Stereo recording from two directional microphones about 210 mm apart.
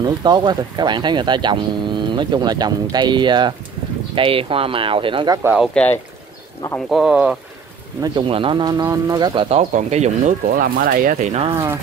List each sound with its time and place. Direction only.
0.0 s speech: 20° right (ahead or behind)
6.9 s speech: centre (ahead or behind)
8.0 s speech: 25° right (ahead or behind)